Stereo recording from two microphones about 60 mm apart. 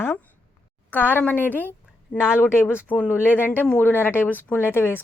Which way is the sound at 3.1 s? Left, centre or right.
Left.